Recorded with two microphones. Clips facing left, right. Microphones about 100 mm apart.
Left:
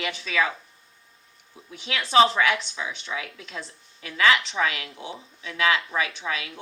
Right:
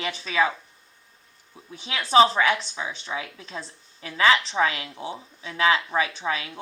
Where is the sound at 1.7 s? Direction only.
30° right (ahead or behind).